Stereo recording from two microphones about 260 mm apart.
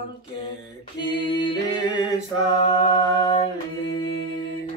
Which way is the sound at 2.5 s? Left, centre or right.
Centre.